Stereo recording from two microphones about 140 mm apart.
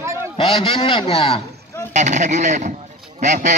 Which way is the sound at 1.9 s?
60° right (ahead or behind).